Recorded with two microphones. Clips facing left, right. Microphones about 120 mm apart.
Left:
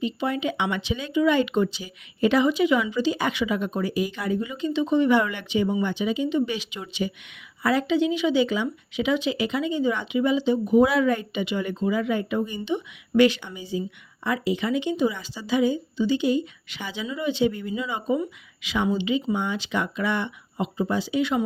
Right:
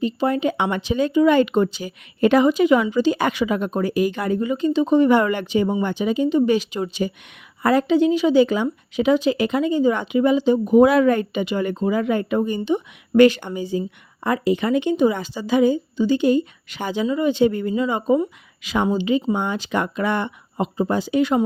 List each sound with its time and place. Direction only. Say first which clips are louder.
0.0 s speech: right 6 dB; 40° right (ahead or behind)